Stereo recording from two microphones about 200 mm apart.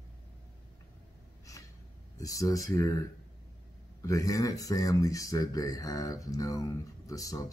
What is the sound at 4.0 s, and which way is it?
Speech, 15° left (ahead or behind).